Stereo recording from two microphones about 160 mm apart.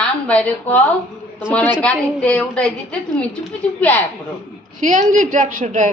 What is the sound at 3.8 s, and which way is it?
Speech, 10° left (ahead or behind).